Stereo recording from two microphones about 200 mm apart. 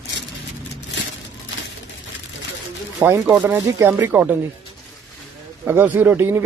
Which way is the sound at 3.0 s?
10° right (ahead or behind).